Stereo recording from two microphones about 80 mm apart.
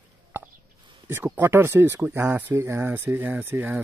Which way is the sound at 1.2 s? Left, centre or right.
Right.